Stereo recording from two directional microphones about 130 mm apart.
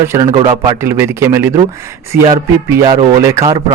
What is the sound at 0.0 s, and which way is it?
Speech, 20° right (ahead or behind).